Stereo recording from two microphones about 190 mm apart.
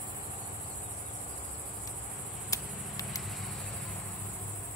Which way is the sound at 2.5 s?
20° left (ahead or behind).